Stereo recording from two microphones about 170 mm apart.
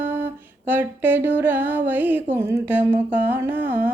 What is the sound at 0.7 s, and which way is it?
Music, 10° right (ahead or behind).